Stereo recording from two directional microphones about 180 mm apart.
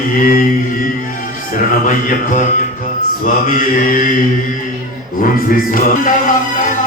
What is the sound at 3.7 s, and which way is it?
Mantra, 45° left (ahead or behind).